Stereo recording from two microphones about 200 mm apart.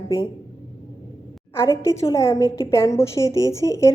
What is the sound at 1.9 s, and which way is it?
A woman's voice, 15° left (ahead or behind).